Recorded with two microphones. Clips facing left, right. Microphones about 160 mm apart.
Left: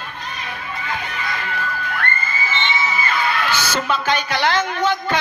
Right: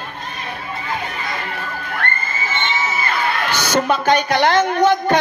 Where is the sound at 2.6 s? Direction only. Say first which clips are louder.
Right 1 dB; 45° right (ahead or behind).